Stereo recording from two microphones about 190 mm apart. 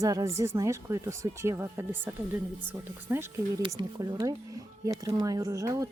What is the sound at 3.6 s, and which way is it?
Speech, 20° right (ahead or behind).